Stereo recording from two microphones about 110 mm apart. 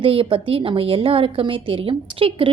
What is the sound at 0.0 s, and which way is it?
A woman's voice, 55° right (ahead or behind).